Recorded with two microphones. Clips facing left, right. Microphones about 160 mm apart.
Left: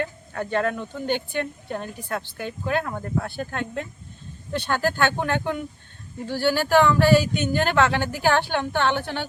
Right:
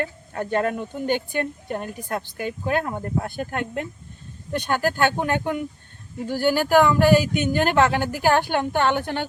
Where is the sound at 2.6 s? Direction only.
15° right (ahead or behind).